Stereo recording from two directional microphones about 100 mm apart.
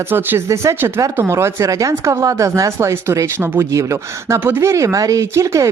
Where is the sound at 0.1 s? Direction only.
25° right (ahead or behind).